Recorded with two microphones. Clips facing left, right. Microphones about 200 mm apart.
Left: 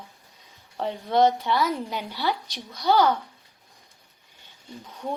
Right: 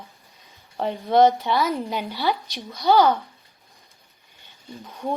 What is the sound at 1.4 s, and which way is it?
Speech, 15° right (ahead or behind).